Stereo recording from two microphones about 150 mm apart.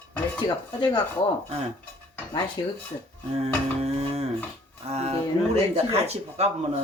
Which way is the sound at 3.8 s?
45° right (ahead or behind).